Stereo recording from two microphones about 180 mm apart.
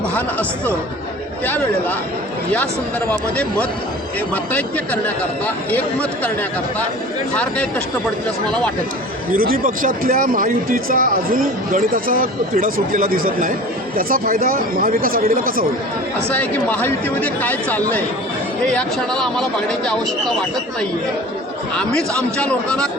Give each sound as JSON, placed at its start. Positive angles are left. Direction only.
{"t": 0.1, "sound": "a man's voice", "side_deg": 10}
{"t": 3.1, "sound": "speech", "side_deg": 5}
{"t": 5.7, "sound": "speech", "side_deg": 5}
{"t": 9.3, "sound": "speech", "side_deg": -50}
{"t": 16.3, "sound": "speech", "side_deg": 10}
{"t": 21.8, "sound": "speech", "side_deg": 5}